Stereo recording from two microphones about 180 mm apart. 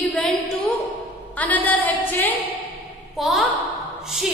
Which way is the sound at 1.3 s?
10° left (ahead or behind).